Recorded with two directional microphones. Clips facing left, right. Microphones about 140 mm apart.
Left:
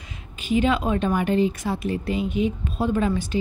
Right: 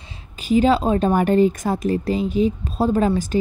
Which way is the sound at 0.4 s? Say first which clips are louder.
Right 5 dB; 35° right (ahead or behind).